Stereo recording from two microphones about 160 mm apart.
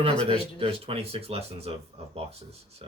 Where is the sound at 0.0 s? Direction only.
35° right (ahead or behind).